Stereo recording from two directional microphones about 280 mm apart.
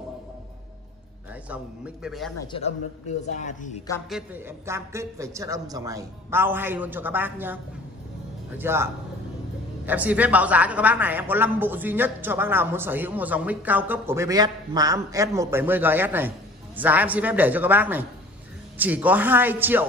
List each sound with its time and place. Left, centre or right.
2.0 s speech: centre
3.3 s speech: left
4.1 s a man's voice: centre